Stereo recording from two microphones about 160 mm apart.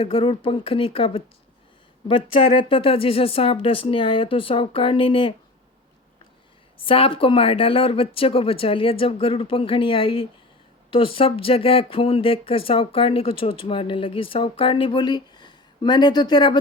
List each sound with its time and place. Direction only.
0.0 s speech: 35° left (ahead or behind)
2.6 s speech: 35° left (ahead or behind)
6.7 s speech: 35° left (ahead or behind)